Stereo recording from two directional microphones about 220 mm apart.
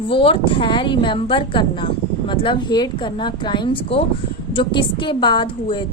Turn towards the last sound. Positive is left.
turn(degrees=20)  # may be behind; listen again after turning